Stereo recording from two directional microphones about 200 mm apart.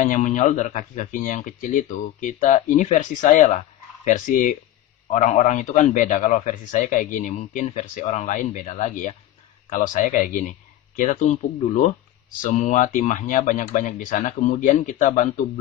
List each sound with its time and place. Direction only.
0.0 s speech: 40° left (ahead or behind)